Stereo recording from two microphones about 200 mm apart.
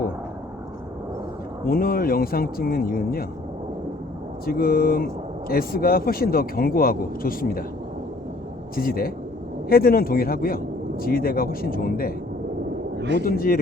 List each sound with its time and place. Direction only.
1.6 s a man's voice: 45° left (ahead or behind)
4.4 s a man's voice: 45° left (ahead or behind)
8.7 s a man's voice: 45° left (ahead or behind)
13.1 s a man's voice: 45° left (ahead or behind)